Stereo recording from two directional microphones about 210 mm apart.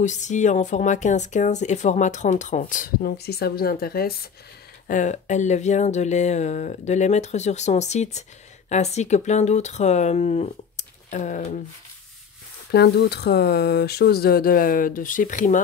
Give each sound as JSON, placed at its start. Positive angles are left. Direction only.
{"t": 0.0, "sound": "speech", "side_deg": 35}
{"t": 12.7, "sound": "speech", "side_deg": 50}